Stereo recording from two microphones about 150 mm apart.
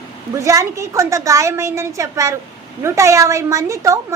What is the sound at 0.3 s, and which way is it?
A woman's voice, 20° right (ahead or behind).